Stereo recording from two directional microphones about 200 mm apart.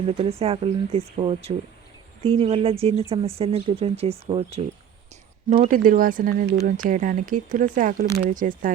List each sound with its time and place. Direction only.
0.0 s speech: 30° right (ahead or behind)